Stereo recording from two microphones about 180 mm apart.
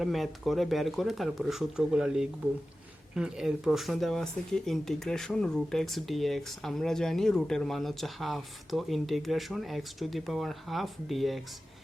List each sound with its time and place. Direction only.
0.0 s speech: centre (ahead or behind)